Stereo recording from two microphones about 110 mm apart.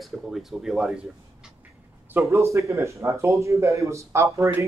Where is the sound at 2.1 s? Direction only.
25° right (ahead or behind).